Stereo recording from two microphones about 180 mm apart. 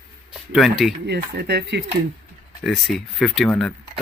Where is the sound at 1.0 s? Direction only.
65° right (ahead or behind).